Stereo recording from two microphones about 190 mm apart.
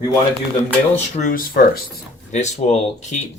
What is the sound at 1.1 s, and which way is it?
Speech, 45° left (ahead or behind).